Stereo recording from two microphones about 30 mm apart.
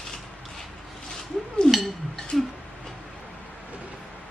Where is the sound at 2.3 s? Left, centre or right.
Centre.